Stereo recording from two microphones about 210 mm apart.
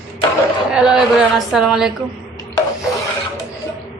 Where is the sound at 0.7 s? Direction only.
5° right (ahead or behind).